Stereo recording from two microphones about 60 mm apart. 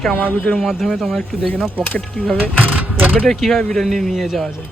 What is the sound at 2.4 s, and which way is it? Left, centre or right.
Vehicle, right.